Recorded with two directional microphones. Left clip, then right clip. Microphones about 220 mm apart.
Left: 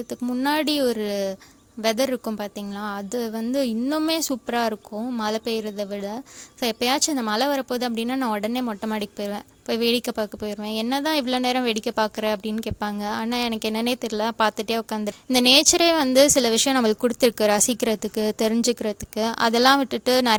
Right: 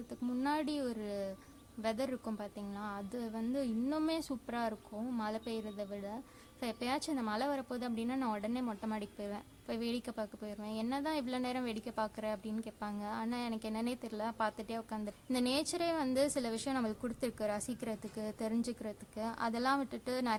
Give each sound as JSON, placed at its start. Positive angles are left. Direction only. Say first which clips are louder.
{"t": 0.1, "sound": "speech", "louder": "left 12 dB", "side_deg": 35}